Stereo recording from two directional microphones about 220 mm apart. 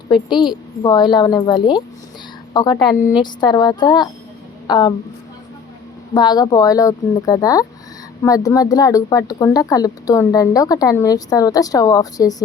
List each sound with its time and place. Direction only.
0.1 s a woman's voice: 20° left (ahead or behind)
6.1 s speech: 20° left (ahead or behind)